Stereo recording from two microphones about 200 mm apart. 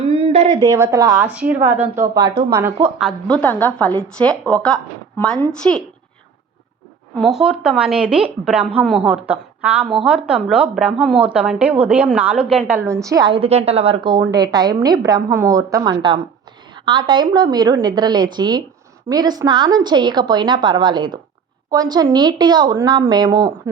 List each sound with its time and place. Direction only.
0.1 s a sound: 30° right (ahead or behind)
0.6 s a woman's voice: 15° right (ahead or behind)
1.2 s a woman's voice: 5° right (ahead or behind)
7.2 s a woman's voice: centre (ahead or behind); by 23.5 s 20° right (ahead or behind)